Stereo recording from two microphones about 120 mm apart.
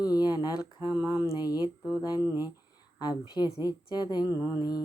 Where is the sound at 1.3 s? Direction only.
30° left (ahead or behind).